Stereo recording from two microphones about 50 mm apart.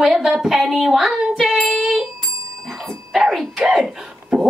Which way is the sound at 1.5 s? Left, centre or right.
Left.